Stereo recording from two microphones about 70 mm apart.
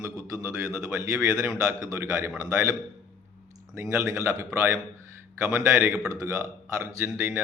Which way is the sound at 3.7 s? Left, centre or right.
Right.